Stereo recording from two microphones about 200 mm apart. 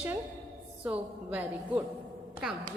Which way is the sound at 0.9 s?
10° right (ahead or behind).